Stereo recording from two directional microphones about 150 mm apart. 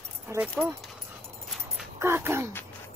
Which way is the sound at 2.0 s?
15° right (ahead or behind).